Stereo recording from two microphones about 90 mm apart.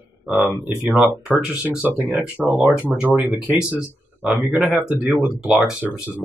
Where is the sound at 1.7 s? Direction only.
20° right (ahead or behind).